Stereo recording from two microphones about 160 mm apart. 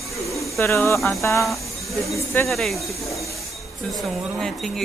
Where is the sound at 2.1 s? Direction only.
15° left (ahead or behind).